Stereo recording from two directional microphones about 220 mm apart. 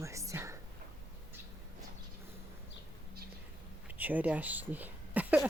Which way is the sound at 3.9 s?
5° right (ahead or behind).